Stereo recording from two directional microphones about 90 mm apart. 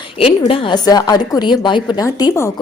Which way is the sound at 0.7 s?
45° left (ahead or behind).